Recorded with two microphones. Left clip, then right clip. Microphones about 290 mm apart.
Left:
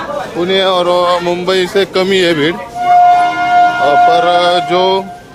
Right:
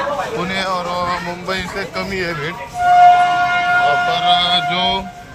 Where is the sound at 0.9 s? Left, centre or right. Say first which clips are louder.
Left 9 dB; left.